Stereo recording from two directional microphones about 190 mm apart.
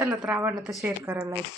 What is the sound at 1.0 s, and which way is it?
Speech, 15° right (ahead or behind).